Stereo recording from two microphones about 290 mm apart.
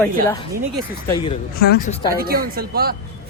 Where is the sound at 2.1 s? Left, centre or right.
Right.